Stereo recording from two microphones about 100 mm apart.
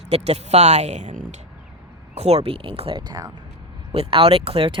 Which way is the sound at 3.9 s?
70° right (ahead or behind).